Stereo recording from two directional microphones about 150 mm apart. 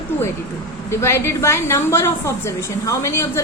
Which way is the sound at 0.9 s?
15° left (ahead or behind).